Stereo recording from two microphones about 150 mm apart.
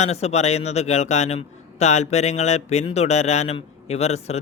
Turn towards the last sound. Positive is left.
turn(degrees=45)  # may be behind; listen again after turning